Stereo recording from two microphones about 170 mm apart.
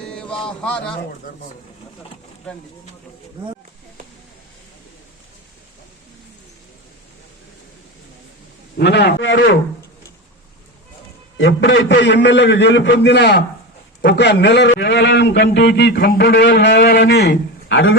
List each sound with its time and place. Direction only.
0.1 s a sound: 5° left (ahead or behind)
0.4 s a man's voice: 5° left (ahead or behind)
8.8 s a man's voice: 80° left
11.3 s a man's voice: 90° left